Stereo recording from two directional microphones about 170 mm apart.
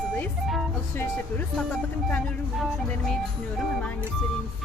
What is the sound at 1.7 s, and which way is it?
Speech, 5° left (ahead or behind).